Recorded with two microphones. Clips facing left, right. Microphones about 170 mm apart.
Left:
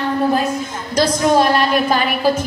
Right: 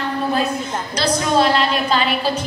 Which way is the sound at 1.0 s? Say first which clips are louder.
Left 4 dB; 50° left (ahead or behind).